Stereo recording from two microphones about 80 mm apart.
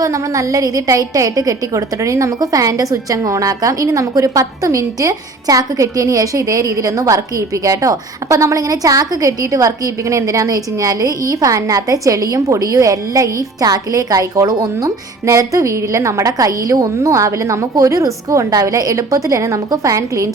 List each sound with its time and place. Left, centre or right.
0.0 s a woman's voice: right